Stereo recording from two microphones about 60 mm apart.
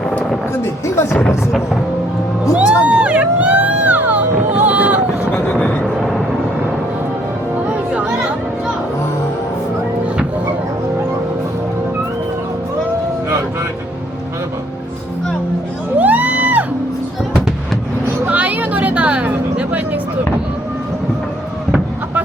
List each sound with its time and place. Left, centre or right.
0.6 s speech: left
2.6 s crowd: centre
4.5 s run: right
5.3 s a sound: left
5.8 s music: centre
16.0 s music: right
18.3 s music: right